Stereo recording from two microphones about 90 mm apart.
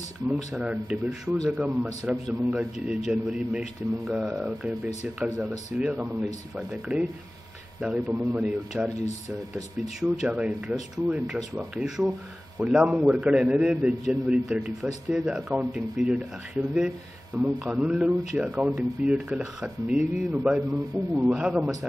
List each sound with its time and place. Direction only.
0.6 s speech: 10° right (ahead or behind)
1.0 s speech: centre (ahead or behind)
1.5 s speech: 15° right (ahead or behind)
9.9 s speech: 10° right (ahead or behind)